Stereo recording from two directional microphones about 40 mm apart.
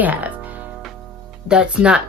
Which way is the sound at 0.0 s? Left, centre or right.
Right.